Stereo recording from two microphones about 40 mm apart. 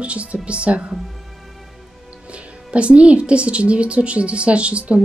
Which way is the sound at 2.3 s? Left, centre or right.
Right.